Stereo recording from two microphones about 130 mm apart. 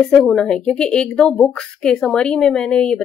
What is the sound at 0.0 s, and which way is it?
Speech, 5° left (ahead or behind).